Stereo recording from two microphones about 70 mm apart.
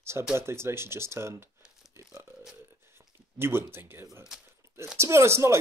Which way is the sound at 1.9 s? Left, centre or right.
Right.